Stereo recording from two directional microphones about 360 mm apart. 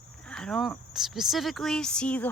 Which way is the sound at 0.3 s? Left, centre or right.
Centre.